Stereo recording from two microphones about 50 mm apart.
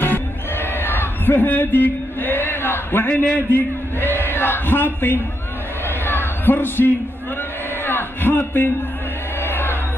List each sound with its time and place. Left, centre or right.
0.0 s music: left
3.2 s a man's voice: left
5.9 s a sound: left
9.4 s music: left